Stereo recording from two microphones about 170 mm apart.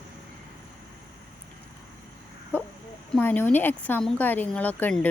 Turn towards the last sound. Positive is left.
turn(degrees=10)  # may be behind; listen again after turning